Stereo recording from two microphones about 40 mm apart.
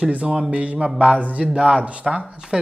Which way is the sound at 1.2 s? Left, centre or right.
Right.